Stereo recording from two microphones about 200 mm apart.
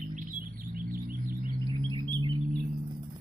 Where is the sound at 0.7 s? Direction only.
45° right (ahead or behind).